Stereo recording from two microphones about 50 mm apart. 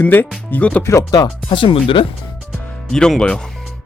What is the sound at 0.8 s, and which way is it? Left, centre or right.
Speech, left.